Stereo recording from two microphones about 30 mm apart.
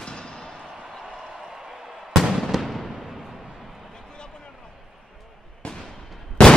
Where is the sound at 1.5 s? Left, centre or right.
Centre.